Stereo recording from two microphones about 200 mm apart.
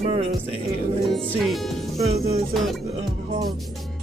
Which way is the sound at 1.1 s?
5° left (ahead or behind).